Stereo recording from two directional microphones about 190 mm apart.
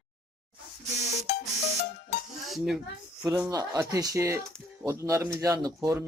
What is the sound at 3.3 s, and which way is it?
Speech, 15° right (ahead or behind).